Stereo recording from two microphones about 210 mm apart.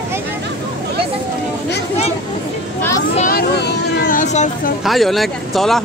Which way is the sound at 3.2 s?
45° left (ahead or behind).